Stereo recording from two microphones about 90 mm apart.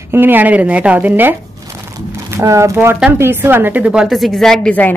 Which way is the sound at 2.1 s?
30° right (ahead or behind).